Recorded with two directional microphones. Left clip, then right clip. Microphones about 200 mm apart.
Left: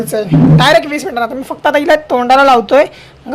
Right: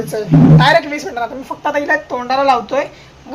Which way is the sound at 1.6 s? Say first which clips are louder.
Left 6 dB; 55° left (ahead or behind).